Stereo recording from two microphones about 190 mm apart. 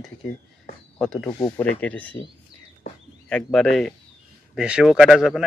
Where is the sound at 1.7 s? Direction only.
10° left (ahead or behind).